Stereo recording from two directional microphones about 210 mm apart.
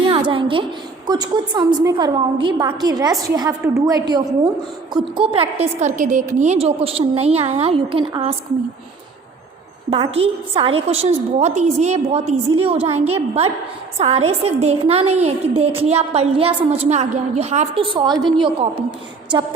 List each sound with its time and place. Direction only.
0.0 s a sound: 25° right (ahead or behind)
1.0 s a woman's voice: 20° right (ahead or behind)
9.9 s a woman's voice: 25° right (ahead or behind)